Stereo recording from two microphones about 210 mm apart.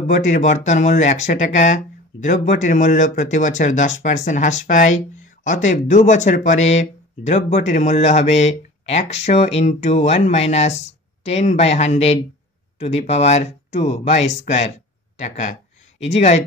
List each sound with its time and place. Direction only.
0.0 s speech: 35° left (ahead or behind)